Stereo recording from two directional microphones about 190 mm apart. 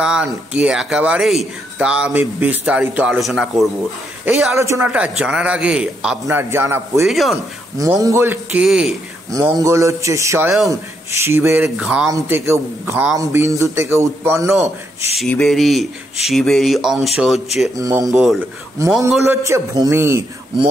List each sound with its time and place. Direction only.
0.0 s speech: 5° right (ahead or behind)
4.6 s speech: 15° right (ahead or behind)
7.1 s speech: centre (ahead or behind)
7.7 s speech: 20° right (ahead or behind)
9.3 s speech: 20° right (ahead or behind)
15.1 s speech: 5° left (ahead or behind)
17.7 s speech: 20° right (ahead or behind)
18.1 s speech: centre (ahead or behind)
18.8 s speech: 15° right (ahead or behind)